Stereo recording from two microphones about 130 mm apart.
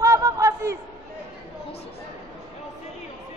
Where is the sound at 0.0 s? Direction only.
25° right (ahead or behind).